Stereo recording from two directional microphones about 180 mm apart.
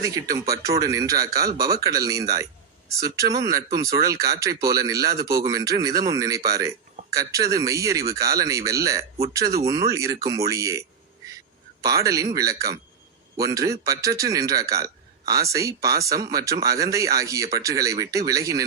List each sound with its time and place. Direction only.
0.0 s speech: 20° right (ahead or behind)